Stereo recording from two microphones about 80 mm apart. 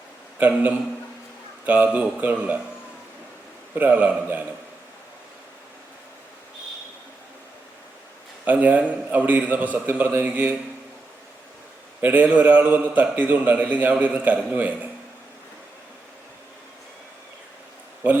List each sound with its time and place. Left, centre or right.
0.3 s a man's voice: right
3.8 s a man's voice: right
8.4 s a man's voice: right
11.9 s a man's voice: right